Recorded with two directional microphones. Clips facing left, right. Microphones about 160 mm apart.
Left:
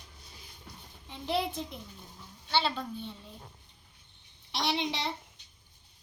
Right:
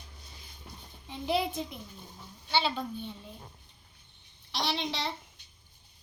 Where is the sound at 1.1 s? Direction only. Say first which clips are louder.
Right 2 dB; 5° right (ahead or behind).